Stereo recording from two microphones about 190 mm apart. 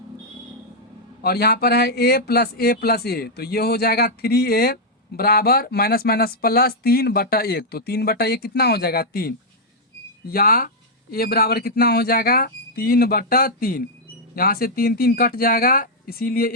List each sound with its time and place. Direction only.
1.2 s speech: 55° left (ahead or behind)